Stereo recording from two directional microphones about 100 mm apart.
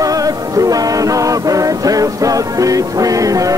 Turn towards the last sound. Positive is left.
turn(degrees=-35)  # may be behind; listen again after turning